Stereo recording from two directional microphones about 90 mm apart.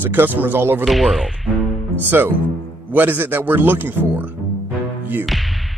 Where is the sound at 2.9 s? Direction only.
20° right (ahead or behind).